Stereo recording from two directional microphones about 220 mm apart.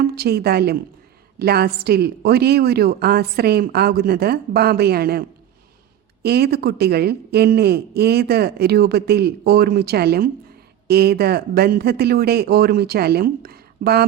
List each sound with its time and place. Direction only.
0.1 s a woman's voice: 45° right (ahead or behind)
6.2 s a woman's voice: 45° right (ahead or behind)